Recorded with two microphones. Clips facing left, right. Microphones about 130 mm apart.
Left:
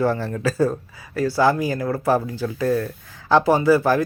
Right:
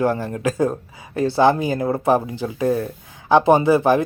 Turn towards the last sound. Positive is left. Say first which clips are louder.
# right 1 dB
turn(degrees=-20)  # may be behind; listen again after turning